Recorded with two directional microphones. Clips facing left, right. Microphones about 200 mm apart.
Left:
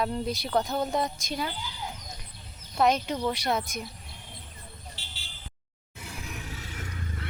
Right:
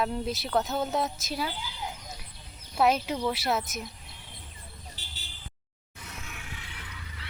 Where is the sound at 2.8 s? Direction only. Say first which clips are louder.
Even; 5° right (ahead or behind).